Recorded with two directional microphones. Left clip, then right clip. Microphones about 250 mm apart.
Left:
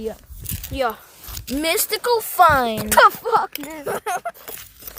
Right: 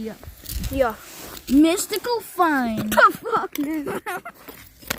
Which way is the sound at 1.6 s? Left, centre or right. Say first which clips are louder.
Even; left.